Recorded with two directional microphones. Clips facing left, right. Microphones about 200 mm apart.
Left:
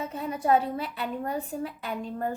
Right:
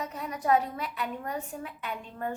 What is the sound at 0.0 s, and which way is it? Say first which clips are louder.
A woman's voice: left 3 dB; 30° left (ahead or behind).